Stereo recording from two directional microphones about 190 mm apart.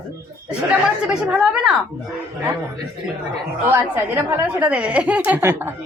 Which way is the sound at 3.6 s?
10° right (ahead or behind).